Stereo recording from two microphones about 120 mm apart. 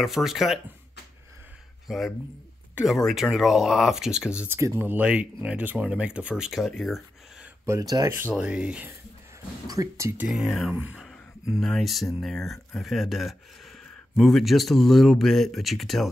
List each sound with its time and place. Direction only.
0.0 s speech: 5° right (ahead or behind)
1.9 s speech: centre (ahead or behind)
4.5 s speech: 20° right (ahead or behind); by 7.0 s centre (ahead or behind)
7.6 s speech: 25° right (ahead or behind)
8.4 s speech: 10° right (ahead or behind)
9.7 s speech: 25° right (ahead or behind)
10.2 s speech: 5° right (ahead or behind)